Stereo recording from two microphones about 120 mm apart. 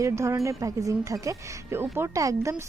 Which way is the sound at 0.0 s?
25° right (ahead or behind).